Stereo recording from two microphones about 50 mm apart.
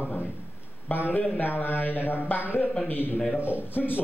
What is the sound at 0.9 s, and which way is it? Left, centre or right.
A man's voice, left.